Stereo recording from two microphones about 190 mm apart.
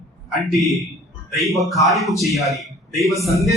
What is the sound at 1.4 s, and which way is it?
A man's voice, centre (ahead or behind).